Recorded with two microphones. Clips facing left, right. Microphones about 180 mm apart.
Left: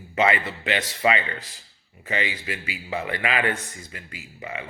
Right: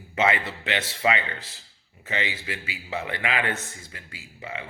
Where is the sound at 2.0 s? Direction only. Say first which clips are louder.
Left 2 dB; 15° left (ahead or behind).